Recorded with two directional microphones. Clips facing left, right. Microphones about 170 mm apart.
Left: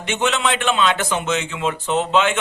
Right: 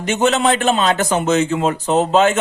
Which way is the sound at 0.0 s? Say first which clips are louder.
Right 5 dB; 40° right (ahead or behind).